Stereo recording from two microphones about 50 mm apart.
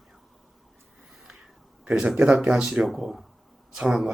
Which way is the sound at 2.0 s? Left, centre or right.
Centre.